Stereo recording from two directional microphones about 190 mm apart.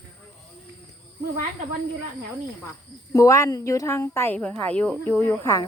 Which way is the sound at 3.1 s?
15° left (ahead or behind).